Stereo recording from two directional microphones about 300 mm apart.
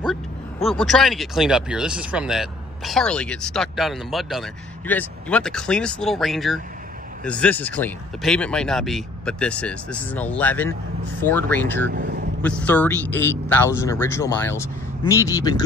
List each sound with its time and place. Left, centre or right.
0.1 s a man's voice: centre
11.9 s speech: right
12.4 s a man's voice: centre